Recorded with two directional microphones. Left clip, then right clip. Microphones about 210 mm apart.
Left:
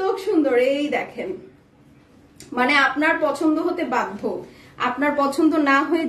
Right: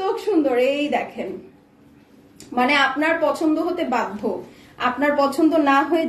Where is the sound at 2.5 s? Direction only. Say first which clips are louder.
Even; 15° left (ahead or behind).